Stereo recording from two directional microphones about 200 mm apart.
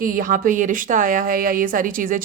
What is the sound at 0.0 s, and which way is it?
A woman's voice, 45° right (ahead or behind).